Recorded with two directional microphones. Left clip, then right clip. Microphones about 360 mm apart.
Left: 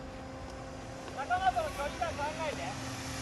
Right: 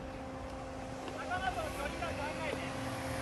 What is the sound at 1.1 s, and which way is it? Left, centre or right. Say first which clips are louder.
Vehicle: left 7 dB; right.